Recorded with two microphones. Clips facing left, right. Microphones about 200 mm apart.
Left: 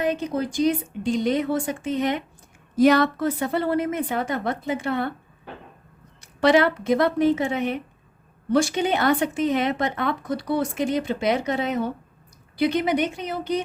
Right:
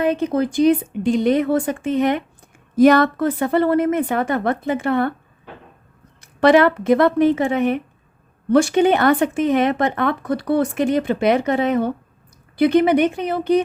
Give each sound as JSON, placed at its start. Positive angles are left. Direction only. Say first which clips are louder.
{"t": 0.0, "sound": "speech", "louder": "right 6 dB", "side_deg": -55}
{"t": 6.1, "sound": "speech", "louder": "right 5 dB", "side_deg": -55}